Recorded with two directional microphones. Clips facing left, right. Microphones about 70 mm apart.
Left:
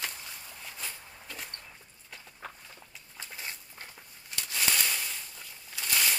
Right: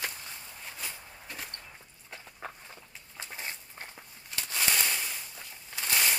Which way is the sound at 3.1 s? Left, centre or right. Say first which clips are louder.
Right 2 dB; right.